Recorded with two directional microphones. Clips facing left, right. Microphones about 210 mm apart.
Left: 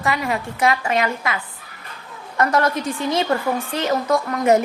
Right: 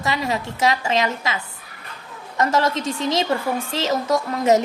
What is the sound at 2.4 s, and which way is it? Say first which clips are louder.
Speech: left 1 dB; 25° right (ahead or behind).